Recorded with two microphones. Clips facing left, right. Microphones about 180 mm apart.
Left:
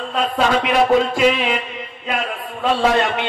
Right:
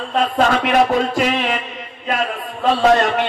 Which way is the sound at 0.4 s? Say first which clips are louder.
Right 1 dB; 45° right (ahead or behind).